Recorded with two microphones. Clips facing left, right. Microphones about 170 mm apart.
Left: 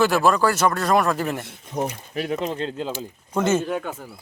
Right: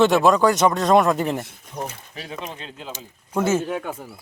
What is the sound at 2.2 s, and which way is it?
Speech, 55° left (ahead or behind).